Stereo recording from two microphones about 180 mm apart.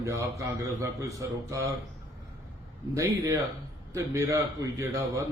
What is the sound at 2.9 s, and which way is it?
A man's voice, 20° right (ahead or behind).